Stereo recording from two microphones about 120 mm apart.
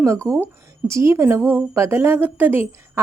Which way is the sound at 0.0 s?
25° right (ahead or behind).